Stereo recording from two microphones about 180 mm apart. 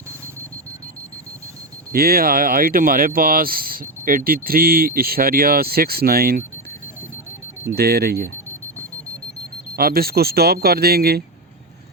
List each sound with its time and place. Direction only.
1.9 s speech: 55° right (ahead or behind)
7.8 s speech: 60° right (ahead or behind)
9.7 s speech: 55° right (ahead or behind)